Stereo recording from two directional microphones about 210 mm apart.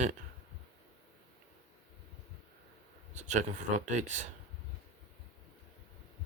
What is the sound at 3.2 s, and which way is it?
Speech, 35° right (ahead or behind).